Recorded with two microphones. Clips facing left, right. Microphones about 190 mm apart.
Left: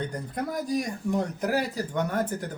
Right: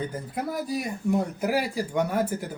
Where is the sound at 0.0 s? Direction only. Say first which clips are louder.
Right 1 dB; 5° right (ahead or behind).